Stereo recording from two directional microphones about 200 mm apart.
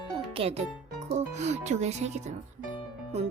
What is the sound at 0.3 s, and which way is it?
Speech, 30° right (ahead or behind).